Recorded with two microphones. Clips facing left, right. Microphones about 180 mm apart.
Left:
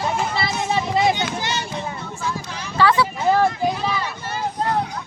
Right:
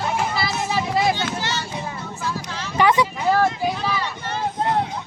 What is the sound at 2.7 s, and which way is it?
Vehicle, 15° right (ahead or behind).